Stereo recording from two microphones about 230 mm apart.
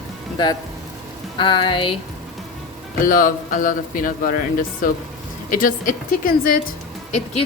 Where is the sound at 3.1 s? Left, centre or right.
Left.